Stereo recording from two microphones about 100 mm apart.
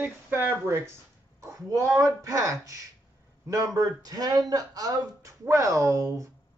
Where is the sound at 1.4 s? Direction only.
35° right (ahead or behind).